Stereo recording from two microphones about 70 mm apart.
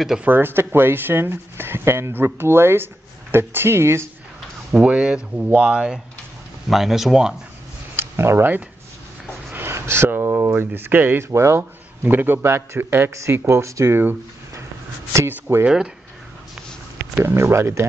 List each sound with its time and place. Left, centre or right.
0.2 s speech: right
4.8 s speech: centre
7.9 s a sound: right
9.5 s speech: right
12.0 s speech: right
15.2 s speech: right
17.2 s speech: right